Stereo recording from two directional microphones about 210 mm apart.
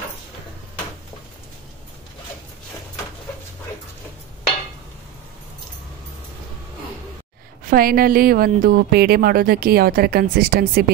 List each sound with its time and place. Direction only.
7.6 s a woman's voice: 45° right (ahead or behind)